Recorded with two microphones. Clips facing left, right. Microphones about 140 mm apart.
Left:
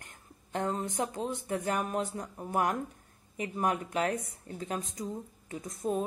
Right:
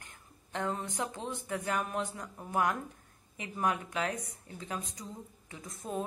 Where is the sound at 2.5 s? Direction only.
45° left (ahead or behind).